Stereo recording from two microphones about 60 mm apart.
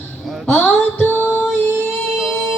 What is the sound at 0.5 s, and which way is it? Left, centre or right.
Music, left.